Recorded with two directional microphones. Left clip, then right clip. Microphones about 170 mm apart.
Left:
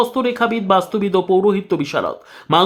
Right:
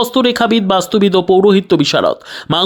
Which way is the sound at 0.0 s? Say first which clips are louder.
Right 4 dB; 35° right (ahead or behind).